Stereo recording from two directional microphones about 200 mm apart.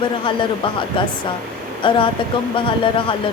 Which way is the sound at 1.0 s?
25° left (ahead or behind).